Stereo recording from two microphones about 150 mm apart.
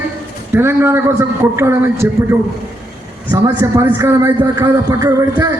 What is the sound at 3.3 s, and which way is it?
A man's voice, 20° right (ahead or behind).